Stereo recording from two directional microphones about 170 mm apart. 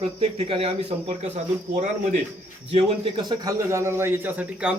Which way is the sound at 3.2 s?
25° right (ahead or behind).